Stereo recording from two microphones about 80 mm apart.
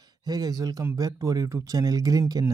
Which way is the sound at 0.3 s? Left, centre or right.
Right.